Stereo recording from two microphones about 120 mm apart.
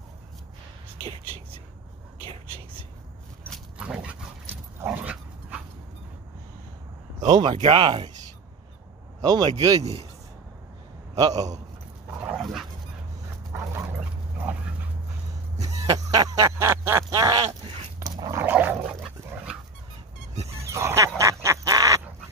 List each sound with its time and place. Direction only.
3.7 s dog: 10° right (ahead or behind)
7.2 s speech: 35° right (ahead or behind)
9.2 s speech: 30° right (ahead or behind)
11.1 s speech: 30° right (ahead or behind)
12.4 s dog: centre (ahead or behind)
13.5 s dog: 25° right (ahead or behind)
14.5 s dog: 15° right (ahead or behind)
15.6 s a sound: 30° right (ahead or behind)
17.1 s speech: 35° right (ahead or behind)
17.9 s dog: 30° right (ahead or behind)
18.4 s a sound: 15° right (ahead or behind)
20.4 s a sound: 25° right (ahead or behind)